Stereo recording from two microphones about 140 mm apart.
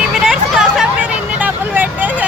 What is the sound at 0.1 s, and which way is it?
Hubbub, 5° right (ahead or behind).